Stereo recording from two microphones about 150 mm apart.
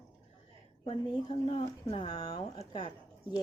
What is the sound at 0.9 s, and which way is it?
Speech, 35° left (ahead or behind).